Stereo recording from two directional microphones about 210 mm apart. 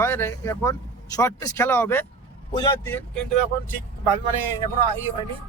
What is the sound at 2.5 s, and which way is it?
Speech, 20° left (ahead or behind).